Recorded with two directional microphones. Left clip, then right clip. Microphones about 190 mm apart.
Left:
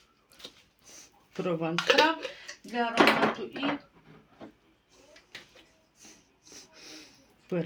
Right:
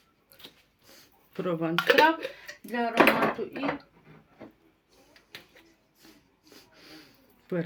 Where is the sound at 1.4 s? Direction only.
15° right (ahead or behind).